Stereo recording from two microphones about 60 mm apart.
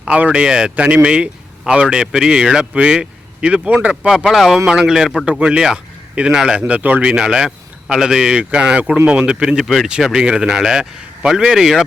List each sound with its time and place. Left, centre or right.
0.2 s speech: right
4.3 s speech: centre
5.2 s speech: centre
6.6 s speech: right
7.1 s speech: centre